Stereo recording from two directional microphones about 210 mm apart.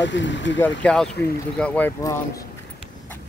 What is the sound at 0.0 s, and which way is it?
Speech, 60° left (ahead or behind).